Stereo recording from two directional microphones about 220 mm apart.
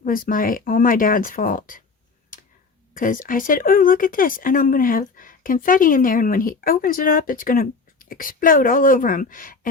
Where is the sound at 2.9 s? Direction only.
40° left (ahead or behind).